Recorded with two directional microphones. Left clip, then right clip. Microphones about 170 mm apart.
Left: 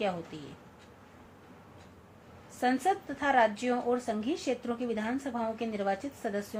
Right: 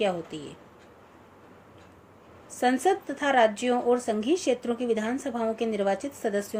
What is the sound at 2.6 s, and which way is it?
Speech, 55° right (ahead or behind).